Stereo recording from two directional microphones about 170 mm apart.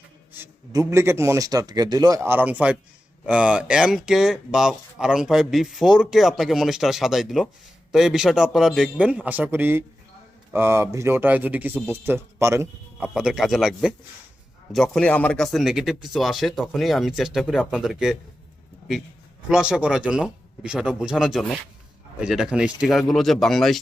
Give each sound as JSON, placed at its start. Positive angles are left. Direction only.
{"t": 0.3, "sound": "speech", "side_deg": -20}
{"t": 13.1, "sound": "speech", "side_deg": 0}
{"t": 19.5, "sound": "speech", "side_deg": -5}